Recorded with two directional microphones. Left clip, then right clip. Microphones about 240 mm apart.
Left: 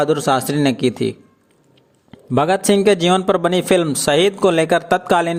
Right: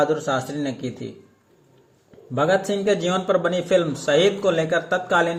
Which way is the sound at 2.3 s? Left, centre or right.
Left.